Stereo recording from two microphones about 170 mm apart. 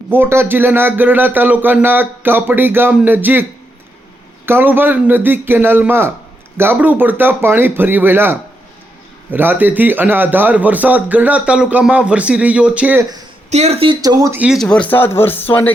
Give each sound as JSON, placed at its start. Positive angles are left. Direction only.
{"t": 0.1, "sound": "speech", "side_deg": -15}
{"t": 4.4, "sound": "speech", "side_deg": -10}
{"t": 13.5, "sound": "speech", "side_deg": -40}
{"t": 14.3, "sound": "speech", "side_deg": -5}